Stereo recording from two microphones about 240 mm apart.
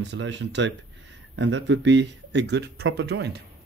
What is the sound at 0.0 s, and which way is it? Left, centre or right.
Speech, right.